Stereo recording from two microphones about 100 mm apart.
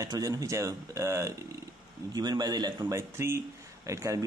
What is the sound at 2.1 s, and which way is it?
Speech, 45° right (ahead or behind).